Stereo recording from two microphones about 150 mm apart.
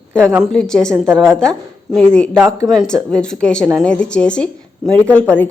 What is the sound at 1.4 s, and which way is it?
A woman's voice, 5° left (ahead or behind).